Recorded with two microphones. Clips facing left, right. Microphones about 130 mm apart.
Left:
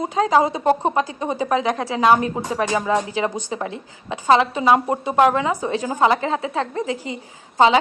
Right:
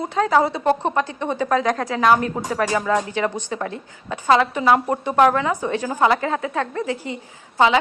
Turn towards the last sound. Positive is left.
turn(degrees=25)  # may be behind; listen again after turning